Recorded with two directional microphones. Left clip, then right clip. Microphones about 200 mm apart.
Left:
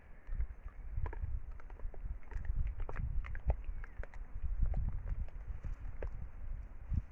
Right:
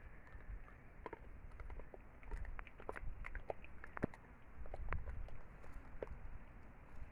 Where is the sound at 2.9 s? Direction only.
5° left (ahead or behind).